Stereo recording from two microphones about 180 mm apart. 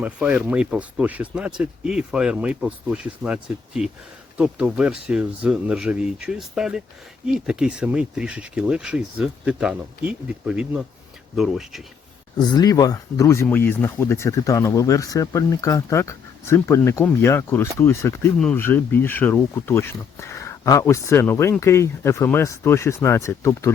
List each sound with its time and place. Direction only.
0.0 s speech: 10° right (ahead or behind)
12.5 s speech: 20° left (ahead or behind)